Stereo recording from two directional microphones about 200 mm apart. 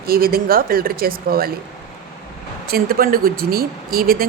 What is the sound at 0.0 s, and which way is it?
Speech, 50° right (ahead or behind).